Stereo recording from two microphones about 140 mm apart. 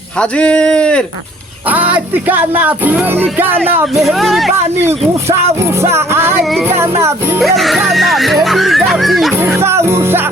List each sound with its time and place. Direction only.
0.2 s speech: 10° left (ahead or behind)
1.7 s music: 10° right (ahead or behind)
4.0 s music: centre (ahead or behind)
4.8 s speech: 20° right (ahead or behind)
6.7 s music: 20° right (ahead or behind)
7.4 s music: centre (ahead or behind)
9.4 s speech: 20° right (ahead or behind)